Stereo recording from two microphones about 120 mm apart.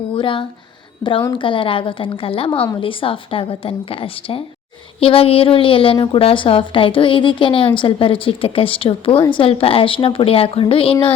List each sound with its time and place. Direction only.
0.1 s a woman's voice: 45° left (ahead or behind)